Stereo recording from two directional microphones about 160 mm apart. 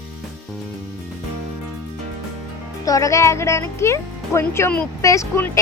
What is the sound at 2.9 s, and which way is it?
Speech, 20° left (ahead or behind).